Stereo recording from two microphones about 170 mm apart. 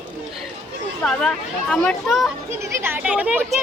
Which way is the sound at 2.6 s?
10° right (ahead or behind).